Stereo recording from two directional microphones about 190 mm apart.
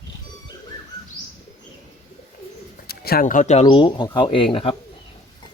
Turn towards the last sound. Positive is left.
turn(degrees=30)  # may be behind; listen again after turning